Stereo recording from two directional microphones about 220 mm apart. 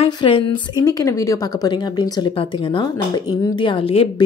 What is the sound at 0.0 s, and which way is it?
A woman's voice, 25° left (ahead or behind).